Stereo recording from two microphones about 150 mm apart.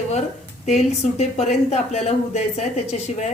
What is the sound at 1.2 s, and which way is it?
A woman's voice, 45° left (ahead or behind).